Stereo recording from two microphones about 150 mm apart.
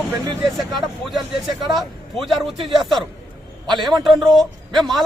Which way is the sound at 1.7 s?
Centre (ahead or behind).